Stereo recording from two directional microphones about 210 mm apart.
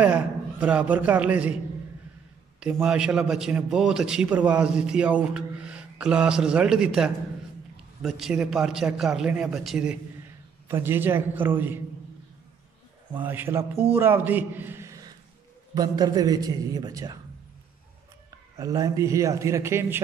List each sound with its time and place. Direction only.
0.0 s a man's voice: 5° right (ahead or behind)
2.6 s a man's voice: 5° right (ahead or behind)
13.2 s a man's voice: 10° right (ahead or behind)
18.6 s a man's voice: 15° right (ahead or behind)